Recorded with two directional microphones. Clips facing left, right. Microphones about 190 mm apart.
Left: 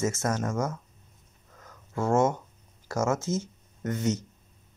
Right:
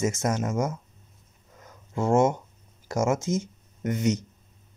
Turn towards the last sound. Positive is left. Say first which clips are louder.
# right 3 dB
turn(degrees=-15)  # may be behind; listen again after turning